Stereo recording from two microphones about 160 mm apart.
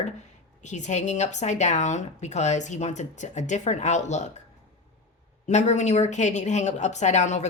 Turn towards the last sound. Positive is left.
turn(degrees=45)  # may be behind; listen again after turning